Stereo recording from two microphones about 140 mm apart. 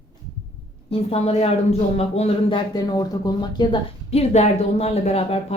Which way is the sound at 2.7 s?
30° left (ahead or behind).